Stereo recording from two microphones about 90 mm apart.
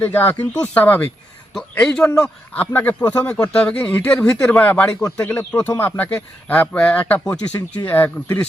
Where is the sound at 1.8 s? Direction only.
5° left (ahead or behind).